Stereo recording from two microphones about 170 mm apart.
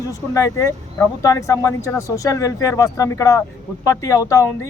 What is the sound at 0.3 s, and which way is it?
Speech, 15° left (ahead or behind).